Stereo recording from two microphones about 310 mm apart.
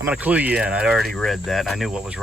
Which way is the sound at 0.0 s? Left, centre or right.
Centre.